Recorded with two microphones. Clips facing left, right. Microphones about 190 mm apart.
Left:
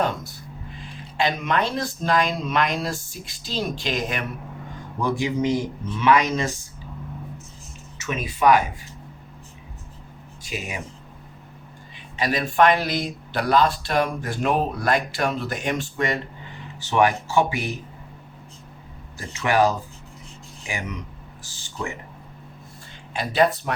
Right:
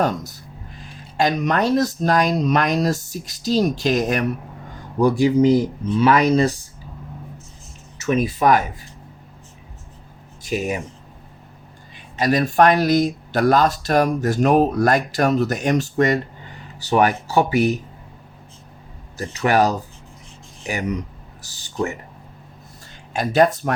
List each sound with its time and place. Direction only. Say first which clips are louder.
0.0 s speech: right 3 dB; 40° right (ahead or behind)
7.9 s speech: right 8 dB; 35° right (ahead or behind)
10.4 s speech: right 9 dB; 40° right (ahead or behind)
12.1 s speech: right 5 dB; 45° right (ahead or behind)
19.1 s speech: right 3 dB; 40° right (ahead or behind)
23.1 s speech: right 4 dB; 45° right (ahead or behind)